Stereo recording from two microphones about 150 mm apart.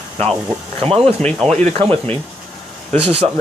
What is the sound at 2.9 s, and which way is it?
Speech, 40° right (ahead or behind).